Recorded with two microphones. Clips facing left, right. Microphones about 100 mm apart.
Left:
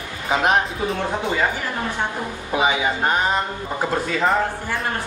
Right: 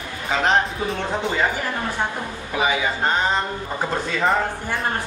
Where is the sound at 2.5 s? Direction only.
20° left (ahead or behind).